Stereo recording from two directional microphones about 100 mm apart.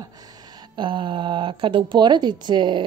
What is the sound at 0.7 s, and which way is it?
Speech, 50° right (ahead or behind).